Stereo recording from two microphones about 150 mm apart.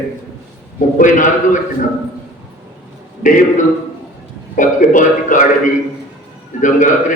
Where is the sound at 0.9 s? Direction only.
60° left (ahead or behind).